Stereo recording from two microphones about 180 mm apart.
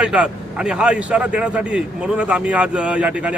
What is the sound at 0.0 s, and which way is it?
A man's voice, 5° right (ahead or behind).